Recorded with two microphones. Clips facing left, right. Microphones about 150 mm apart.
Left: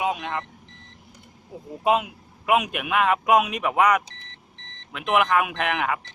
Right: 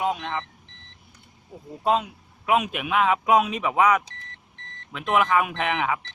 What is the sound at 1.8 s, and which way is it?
Speech, 10° left (ahead or behind).